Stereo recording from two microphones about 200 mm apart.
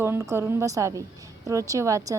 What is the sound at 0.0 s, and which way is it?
A woman's voice, 15° right (ahead or behind).